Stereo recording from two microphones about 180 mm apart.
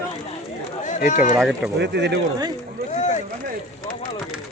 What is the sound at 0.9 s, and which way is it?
Speech, 45° left (ahead or behind).